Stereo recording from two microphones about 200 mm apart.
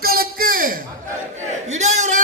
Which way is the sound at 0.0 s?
50° right (ahead or behind).